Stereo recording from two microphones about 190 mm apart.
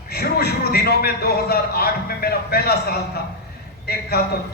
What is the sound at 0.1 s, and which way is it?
A man's voice, 55° left (ahead or behind).